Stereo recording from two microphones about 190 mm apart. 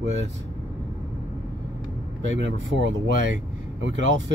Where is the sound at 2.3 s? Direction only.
75° right (ahead or behind).